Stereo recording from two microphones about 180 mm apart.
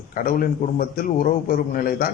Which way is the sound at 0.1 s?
50° left (ahead or behind).